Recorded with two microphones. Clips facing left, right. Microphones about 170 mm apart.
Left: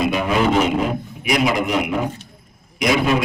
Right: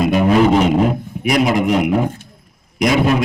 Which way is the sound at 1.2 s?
45° right (ahead or behind).